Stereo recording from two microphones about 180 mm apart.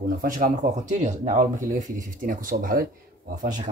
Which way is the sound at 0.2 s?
50° right (ahead or behind).